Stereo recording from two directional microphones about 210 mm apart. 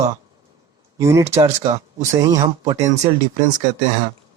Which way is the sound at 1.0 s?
15° right (ahead or behind).